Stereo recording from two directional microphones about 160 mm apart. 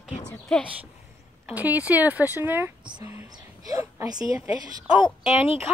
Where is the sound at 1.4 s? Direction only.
10° right (ahead or behind); by 4.8 s 25° right (ahead or behind).